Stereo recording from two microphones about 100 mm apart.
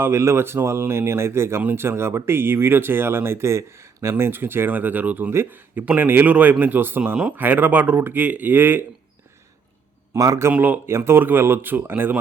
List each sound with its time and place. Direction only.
0.0 s speech: 25° right (ahead or behind)
10.2 s speech: 40° right (ahead or behind)
10.5 s speech: 15° right (ahead or behind)